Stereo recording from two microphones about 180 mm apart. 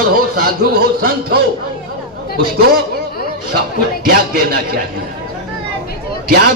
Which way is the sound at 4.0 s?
60° right (ahead or behind).